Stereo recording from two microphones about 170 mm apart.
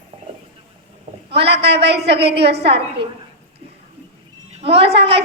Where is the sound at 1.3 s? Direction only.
80° right.